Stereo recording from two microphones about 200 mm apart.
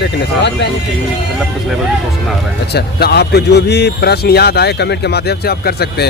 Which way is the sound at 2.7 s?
50° left (ahead or behind).